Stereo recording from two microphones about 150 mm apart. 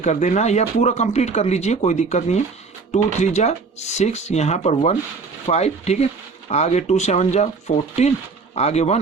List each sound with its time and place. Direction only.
0.0 s speech: 50° left (ahead or behind)